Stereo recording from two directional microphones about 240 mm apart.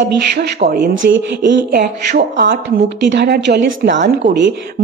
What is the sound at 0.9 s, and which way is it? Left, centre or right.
A woman's voice, right.